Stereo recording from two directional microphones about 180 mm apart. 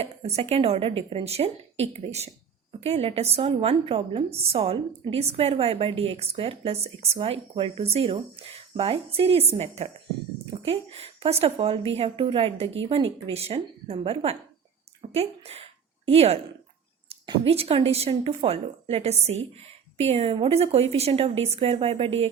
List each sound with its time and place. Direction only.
0.0 s a woman's voice: 35° right (ahead or behind)
15.1 s a sound: 35° right (ahead or behind)
17.1 s a woman's voice: 30° right (ahead or behind)